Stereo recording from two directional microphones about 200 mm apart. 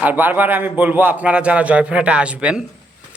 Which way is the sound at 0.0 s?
10° right (ahead or behind).